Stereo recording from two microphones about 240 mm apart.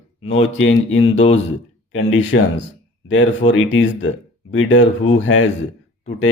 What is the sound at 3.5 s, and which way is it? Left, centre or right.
Speech, left.